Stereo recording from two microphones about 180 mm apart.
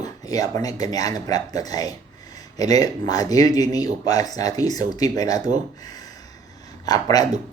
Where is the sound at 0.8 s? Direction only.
20° left (ahead or behind).